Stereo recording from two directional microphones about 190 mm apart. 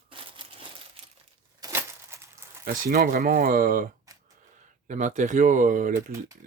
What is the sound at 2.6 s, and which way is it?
Speech, 50° right (ahead or behind).